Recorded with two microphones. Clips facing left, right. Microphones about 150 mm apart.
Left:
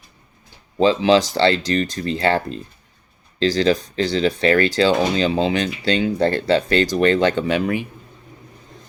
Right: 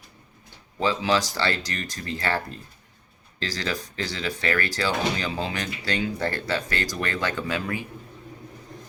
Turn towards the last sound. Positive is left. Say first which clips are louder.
# left 9 dB
turn(degrees=20)  # may be behind; listen again after turning